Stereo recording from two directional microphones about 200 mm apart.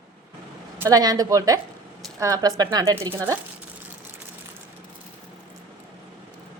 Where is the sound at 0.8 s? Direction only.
20° right (ahead or behind).